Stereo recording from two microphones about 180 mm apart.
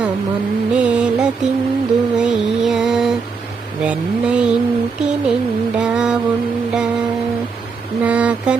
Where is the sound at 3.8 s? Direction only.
5° right (ahead or behind).